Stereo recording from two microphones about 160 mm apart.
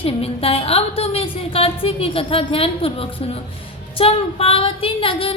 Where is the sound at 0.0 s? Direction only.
35° left (ahead or behind).